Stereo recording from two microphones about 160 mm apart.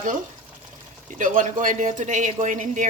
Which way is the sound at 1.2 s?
55° right (ahead or behind).